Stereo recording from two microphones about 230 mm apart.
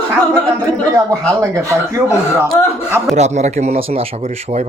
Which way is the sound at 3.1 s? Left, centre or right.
Right.